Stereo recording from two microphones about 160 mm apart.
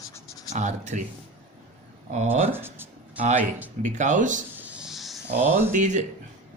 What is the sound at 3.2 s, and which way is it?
Speech, 55° right (ahead or behind).